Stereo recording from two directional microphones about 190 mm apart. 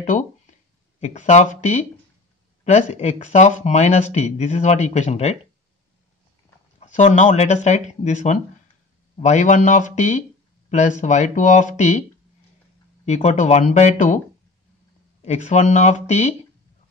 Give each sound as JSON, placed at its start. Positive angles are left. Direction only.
{"t": 0.0, "sound": "speech", "side_deg": 45}
{"t": 6.8, "sound": "speech", "side_deg": 40}
{"t": 13.0, "sound": "speech", "side_deg": 35}
{"t": 15.2, "sound": "speech", "side_deg": 35}